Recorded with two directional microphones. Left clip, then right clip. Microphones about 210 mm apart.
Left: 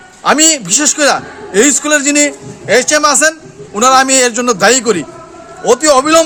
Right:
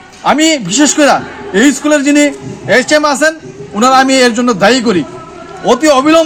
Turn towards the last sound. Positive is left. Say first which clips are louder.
# right 1 dB
turn(degrees=25)  # may be behind; listen again after turning